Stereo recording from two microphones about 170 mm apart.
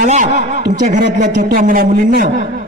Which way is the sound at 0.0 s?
45° right (ahead or behind).